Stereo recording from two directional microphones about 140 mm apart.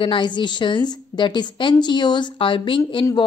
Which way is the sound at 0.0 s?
35° left (ahead or behind).